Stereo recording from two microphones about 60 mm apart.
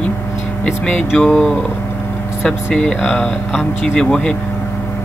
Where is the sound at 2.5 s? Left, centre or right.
Centre.